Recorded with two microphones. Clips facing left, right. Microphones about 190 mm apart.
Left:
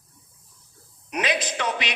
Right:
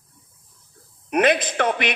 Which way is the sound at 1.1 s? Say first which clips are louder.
Right 8 dB; 55° right (ahead or behind).